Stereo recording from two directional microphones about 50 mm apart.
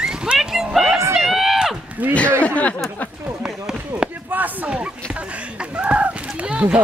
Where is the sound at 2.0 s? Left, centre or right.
Right.